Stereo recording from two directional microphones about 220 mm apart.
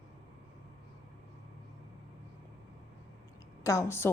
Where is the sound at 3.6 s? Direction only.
10° left (ahead or behind).